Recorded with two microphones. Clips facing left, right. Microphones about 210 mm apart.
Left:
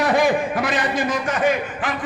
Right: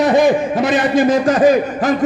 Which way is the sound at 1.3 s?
35° right (ahead or behind).